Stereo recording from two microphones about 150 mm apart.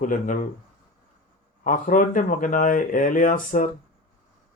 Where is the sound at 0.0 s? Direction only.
65° left (ahead or behind).